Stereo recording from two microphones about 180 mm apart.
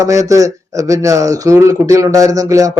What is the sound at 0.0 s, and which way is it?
Speech, 20° right (ahead or behind).